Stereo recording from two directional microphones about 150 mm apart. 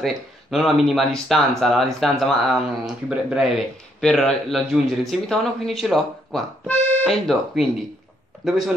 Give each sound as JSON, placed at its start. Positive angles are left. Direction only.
{"t": 0.0, "sound": "speech", "side_deg": 0}